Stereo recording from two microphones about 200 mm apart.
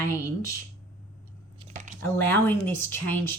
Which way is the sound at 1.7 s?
40° right (ahead or behind).